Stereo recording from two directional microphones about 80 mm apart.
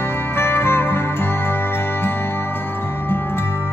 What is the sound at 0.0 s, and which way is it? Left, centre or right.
Music, left.